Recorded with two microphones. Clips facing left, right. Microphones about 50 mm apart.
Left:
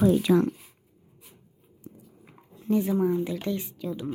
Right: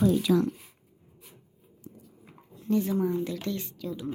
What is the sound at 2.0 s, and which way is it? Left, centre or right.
Dog, centre.